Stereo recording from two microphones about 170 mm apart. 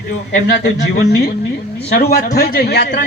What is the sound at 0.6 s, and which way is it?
A man's voice, 70° left (ahead or behind).